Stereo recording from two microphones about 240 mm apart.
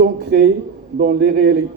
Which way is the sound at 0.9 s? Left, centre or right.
Right.